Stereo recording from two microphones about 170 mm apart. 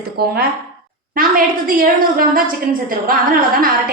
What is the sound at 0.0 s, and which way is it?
A woman's voice, 65° right (ahead or behind).